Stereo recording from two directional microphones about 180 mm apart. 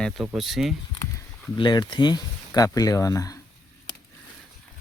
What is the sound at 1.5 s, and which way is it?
Speech, 25° left (ahead or behind).